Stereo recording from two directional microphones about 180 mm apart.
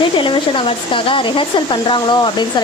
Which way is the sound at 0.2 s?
30° left (ahead or behind).